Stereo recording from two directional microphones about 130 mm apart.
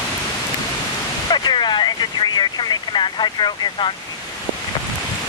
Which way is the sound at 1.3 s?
35° left (ahead or behind).